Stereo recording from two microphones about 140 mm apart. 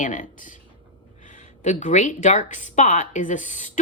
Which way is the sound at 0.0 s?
65° left (ahead or behind).